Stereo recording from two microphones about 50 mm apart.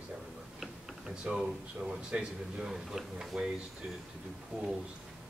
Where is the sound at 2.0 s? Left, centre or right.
Centre.